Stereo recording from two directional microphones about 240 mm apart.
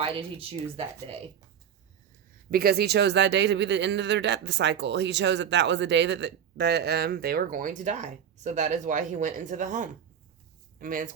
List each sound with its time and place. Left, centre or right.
0.0 s speech: right
2.5 s speech: right